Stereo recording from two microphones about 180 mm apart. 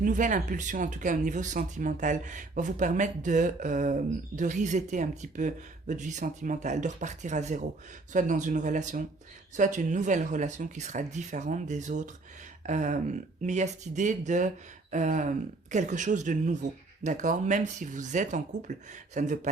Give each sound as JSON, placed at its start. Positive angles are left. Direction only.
{"t": 0.0, "sound": "speech", "side_deg": -45}